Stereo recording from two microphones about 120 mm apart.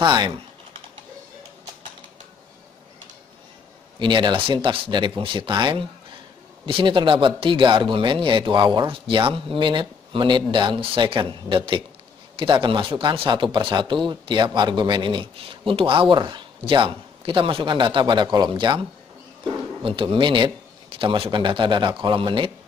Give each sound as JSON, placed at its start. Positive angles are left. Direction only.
{"t": 0.0, "sound": "speech", "side_deg": -40}
{"t": 4.0, "sound": "speech", "side_deg": -40}
{"t": 20.0, "sound": "speech", "side_deg": -45}